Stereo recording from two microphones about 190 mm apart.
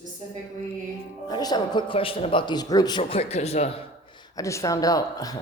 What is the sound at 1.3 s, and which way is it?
A man's voice, 20° left (ahead or behind).